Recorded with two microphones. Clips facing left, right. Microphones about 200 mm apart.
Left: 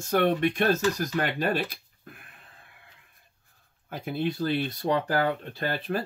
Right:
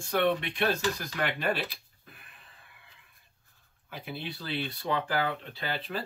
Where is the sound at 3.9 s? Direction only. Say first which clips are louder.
Left 9 dB; 45° left (ahead or behind).